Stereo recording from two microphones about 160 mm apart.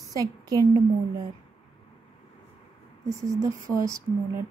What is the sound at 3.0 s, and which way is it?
Speech, 20° right (ahead or behind).